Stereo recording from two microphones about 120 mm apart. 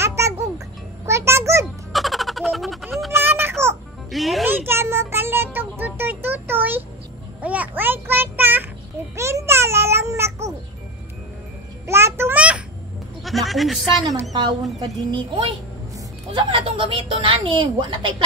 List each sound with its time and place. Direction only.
0.0 s music: 25° right (ahead or behind)
1.9 s a sound: centre (ahead or behind)
3.2 s a sound: 15° right (ahead or behind)
4.1 s music: centre (ahead or behind)
4.5 s music: 20° right (ahead or behind)
7.4 s child singing: 10° right (ahead or behind)
9.1 s music: 25° right (ahead or behind)
11.8 s music: 20° right (ahead or behind)
13.2 s speech: centre (ahead or behind)
14.8 s a woman's voice: 40° right (ahead or behind)